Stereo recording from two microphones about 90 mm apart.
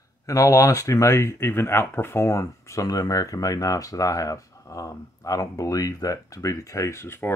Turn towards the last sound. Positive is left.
turn(degrees=25)  # may be behind; listen again after turning